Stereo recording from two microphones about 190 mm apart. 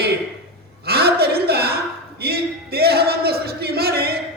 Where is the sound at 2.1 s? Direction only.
55° right (ahead or behind).